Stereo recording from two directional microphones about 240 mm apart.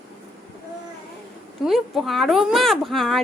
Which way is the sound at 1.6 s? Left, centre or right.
Centre.